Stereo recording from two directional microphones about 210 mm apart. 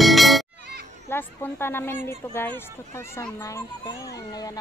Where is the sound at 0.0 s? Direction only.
Centre (ahead or behind).